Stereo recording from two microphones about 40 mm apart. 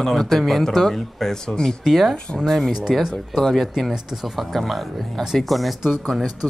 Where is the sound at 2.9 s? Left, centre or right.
Centre.